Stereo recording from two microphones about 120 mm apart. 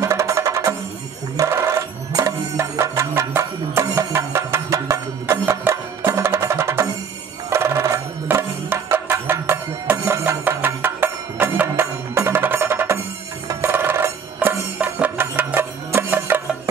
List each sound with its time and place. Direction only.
0.0 s music: 25° right (ahead or behind)